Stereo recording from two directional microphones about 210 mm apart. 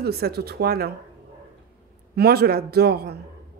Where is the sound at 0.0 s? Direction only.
50° right (ahead or behind).